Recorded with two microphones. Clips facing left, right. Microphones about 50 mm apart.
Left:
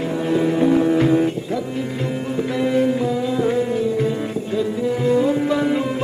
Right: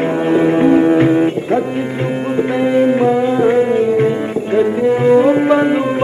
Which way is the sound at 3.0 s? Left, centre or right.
Right.